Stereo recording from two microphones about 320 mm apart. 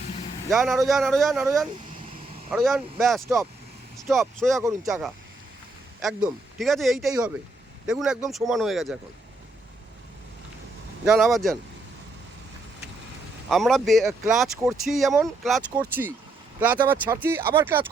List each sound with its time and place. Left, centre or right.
0.5 s speech: centre
11.0 s speech: centre
13.5 s speech: centre